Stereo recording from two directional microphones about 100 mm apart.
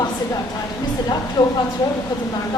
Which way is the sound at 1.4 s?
45° left (ahead or behind).